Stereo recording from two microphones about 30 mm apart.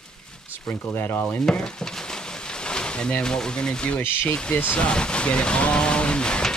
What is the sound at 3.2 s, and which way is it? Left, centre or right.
Speech, left.